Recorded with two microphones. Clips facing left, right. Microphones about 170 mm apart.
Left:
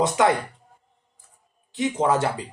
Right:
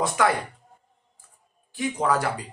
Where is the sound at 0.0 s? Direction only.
20° left (ahead or behind).